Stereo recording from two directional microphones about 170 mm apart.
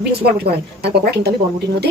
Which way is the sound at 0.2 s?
70° right (ahead or behind).